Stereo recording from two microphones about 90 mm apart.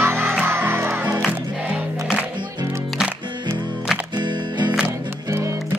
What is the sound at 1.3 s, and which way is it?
Music, 15° right (ahead or behind).